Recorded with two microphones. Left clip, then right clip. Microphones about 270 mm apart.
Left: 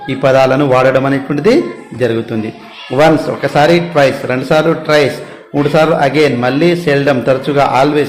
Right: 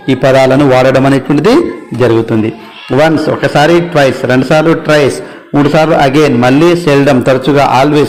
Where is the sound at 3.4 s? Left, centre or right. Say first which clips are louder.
Right 2 dB; right.